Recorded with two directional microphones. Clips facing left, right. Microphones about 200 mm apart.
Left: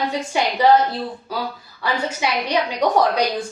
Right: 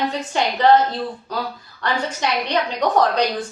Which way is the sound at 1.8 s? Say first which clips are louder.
Even; 10° left (ahead or behind).